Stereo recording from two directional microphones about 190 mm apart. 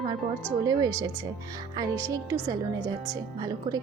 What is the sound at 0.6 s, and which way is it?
A woman's voice, 20° right (ahead or behind).